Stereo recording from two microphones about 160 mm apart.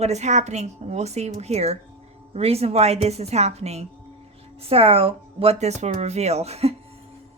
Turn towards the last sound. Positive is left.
turn(degrees=-40)  # may be behind; listen again after turning